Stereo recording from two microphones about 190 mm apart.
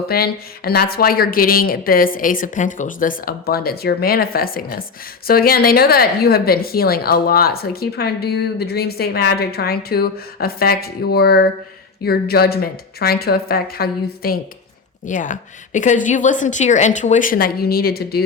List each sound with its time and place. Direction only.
0.1 s a woman's voice: 55° left (ahead or behind)
15.0 s a woman's voice: 40° left (ahead or behind)